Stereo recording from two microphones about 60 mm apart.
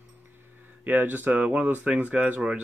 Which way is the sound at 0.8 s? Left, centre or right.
Right.